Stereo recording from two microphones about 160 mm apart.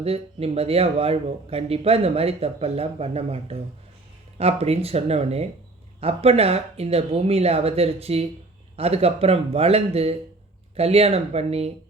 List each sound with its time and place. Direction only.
0.0 s speech: 40° right (ahead or behind)